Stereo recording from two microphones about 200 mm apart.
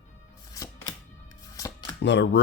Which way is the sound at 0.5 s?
15° left (ahead or behind).